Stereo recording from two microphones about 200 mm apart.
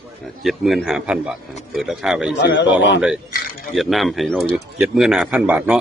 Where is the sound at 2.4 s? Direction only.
60° left (ahead or behind).